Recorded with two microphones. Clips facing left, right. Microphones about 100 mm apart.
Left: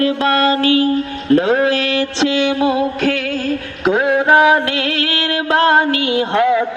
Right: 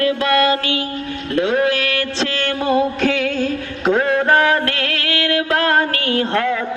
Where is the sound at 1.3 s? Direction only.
35° left (ahead or behind); by 2.7 s 15° left (ahead or behind).